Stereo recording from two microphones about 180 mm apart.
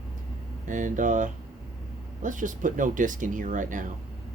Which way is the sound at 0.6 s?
45° right (ahead or behind).